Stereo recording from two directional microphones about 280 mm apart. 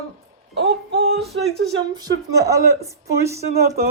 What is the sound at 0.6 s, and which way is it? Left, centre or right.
Music, right.